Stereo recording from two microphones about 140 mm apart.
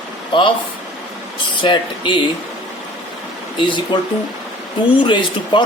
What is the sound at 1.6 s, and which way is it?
Speech, 35° left (ahead or behind).